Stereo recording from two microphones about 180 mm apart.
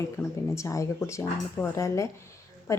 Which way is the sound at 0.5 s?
15° left (ahead or behind).